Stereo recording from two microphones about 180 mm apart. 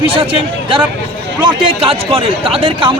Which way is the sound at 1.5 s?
30° right (ahead or behind).